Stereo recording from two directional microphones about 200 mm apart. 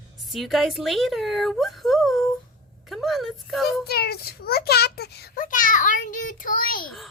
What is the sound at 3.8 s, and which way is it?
A child's voice, 50° left (ahead or behind).